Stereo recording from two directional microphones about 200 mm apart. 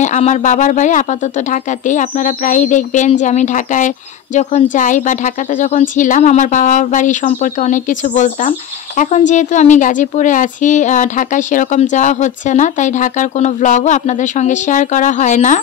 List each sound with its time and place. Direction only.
0.0 s speech: 35° left (ahead or behind)